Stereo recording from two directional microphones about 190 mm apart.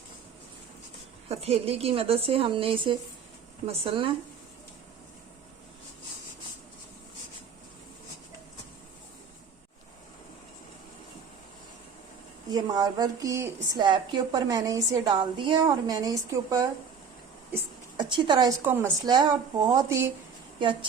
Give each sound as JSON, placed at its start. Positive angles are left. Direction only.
{"t": 1.3, "sound": "a woman's voice", "side_deg": -35}
{"t": 12.5, "sound": "a woman's voice", "side_deg": -20}
{"t": 17.5, "sound": "a sound", "side_deg": -25}
{"t": 18.6, "sound": "speech", "side_deg": -10}
{"t": 19.0, "sound": "a woman's voice", "side_deg": -20}